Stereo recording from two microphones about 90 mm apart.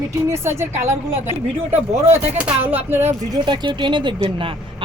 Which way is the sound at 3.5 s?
60° right (ahead or behind).